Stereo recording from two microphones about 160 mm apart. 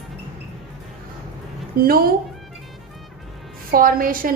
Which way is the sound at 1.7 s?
75° right (ahead or behind).